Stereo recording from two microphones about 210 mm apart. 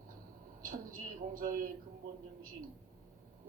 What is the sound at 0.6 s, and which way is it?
A woman's voice, 40° right (ahead or behind).